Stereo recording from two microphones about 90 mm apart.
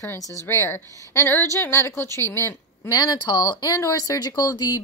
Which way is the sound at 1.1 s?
20° left (ahead or behind).